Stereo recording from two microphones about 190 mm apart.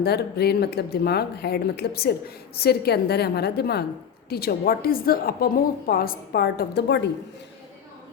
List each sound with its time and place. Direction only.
0.0 s a woman's voice: 55° left (ahead or behind)